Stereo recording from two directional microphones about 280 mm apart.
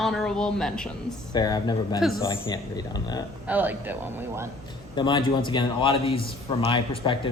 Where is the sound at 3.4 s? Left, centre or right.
Centre.